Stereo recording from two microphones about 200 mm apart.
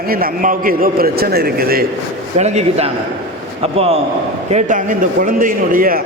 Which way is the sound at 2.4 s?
35° right (ahead or behind).